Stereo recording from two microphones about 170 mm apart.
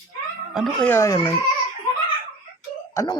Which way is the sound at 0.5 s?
5° left (ahead or behind).